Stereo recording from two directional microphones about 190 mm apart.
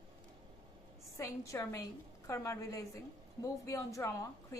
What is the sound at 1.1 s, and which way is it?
A woman's voice, 15° left (ahead or behind).